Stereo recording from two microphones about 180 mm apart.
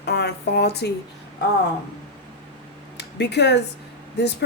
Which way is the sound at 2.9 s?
70° left (ahead or behind).